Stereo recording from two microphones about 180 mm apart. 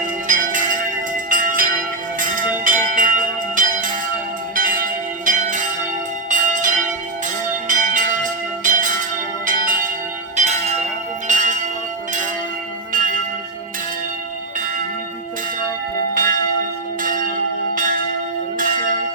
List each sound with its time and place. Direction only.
0.0 s bell: 45° right (ahead or behind)
1.3 s church bell: 50° right (ahead or behind)
12.9 s church bell: 50° right (ahead or behind)
17.0 s church bell: 50° right (ahead or behind)